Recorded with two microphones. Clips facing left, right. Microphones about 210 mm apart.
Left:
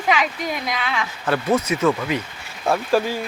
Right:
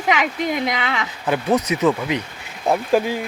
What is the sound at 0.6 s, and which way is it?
Speech, 20° right (ahead or behind).